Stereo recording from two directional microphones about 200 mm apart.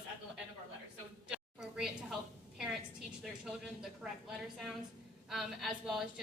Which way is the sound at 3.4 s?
Centre (ahead or behind).